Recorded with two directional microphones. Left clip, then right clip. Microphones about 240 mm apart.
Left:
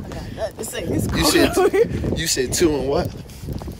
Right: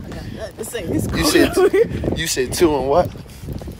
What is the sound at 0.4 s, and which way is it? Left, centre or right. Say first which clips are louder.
Speech: left 1 dB; centre.